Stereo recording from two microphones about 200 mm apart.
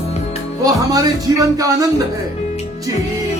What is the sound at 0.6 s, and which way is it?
Speech, 15° right (ahead or behind).